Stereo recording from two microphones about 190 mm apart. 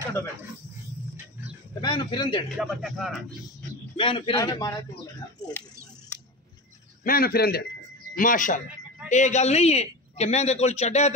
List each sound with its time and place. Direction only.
1.8 s a sound: 25° left (ahead or behind)
2.5 s speech: centre (ahead or behind)
3.9 s a man's voice: 25° left (ahead or behind)
7.1 s a man's voice: 50° left (ahead or behind); by 11.1 s 35° left (ahead or behind)